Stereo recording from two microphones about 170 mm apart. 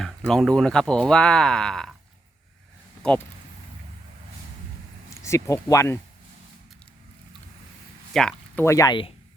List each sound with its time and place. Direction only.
0.3 s speech: 5° left (ahead or behind)
3.0 s speech: 5° left (ahead or behind)
5.2 s speech: 20° left (ahead or behind)
8.1 s a sound: 5° left (ahead or behind)
8.6 s speech: 20° left (ahead or behind)